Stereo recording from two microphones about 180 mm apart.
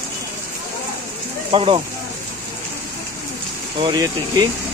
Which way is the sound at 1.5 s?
30° right (ahead or behind).